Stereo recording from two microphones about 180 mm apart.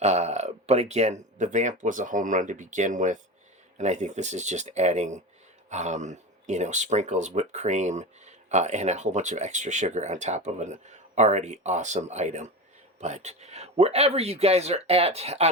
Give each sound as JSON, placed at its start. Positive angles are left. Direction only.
{"t": 0.0, "sound": "speech", "side_deg": -40}